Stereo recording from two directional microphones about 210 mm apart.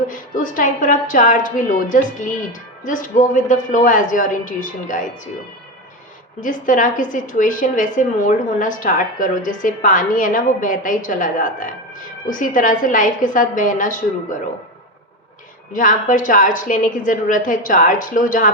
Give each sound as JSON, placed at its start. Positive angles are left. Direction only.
{"t": 0.1, "sound": "a woman's voice", "side_deg": 40}
{"t": 6.4, "sound": "a woman's voice", "side_deg": 40}
{"t": 15.7, "sound": "a woman's voice", "side_deg": 40}